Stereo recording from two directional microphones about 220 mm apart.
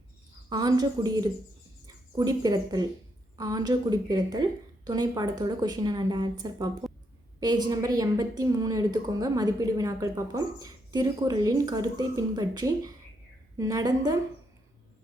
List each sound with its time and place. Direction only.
0.5 s a woman's voice: 20° right (ahead or behind)